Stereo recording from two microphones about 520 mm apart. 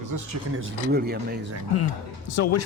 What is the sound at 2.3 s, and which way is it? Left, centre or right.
Speech, left.